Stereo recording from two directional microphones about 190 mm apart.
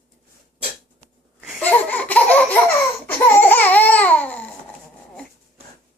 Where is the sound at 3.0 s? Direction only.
10° left (ahead or behind).